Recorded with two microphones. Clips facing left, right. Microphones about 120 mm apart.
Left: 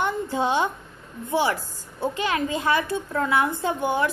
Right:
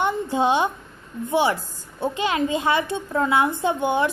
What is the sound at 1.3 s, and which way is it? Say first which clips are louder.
A woman's voice: right 2 dB; 20° right (ahead or behind).